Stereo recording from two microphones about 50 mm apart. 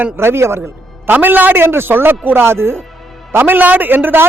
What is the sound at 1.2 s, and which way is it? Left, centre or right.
Speech, right.